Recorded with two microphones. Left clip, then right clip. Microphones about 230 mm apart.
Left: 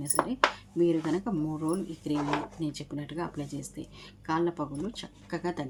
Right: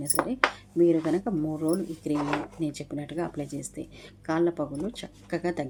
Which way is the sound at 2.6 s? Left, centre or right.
Centre.